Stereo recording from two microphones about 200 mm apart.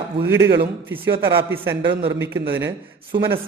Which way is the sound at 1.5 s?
10° right (ahead or behind).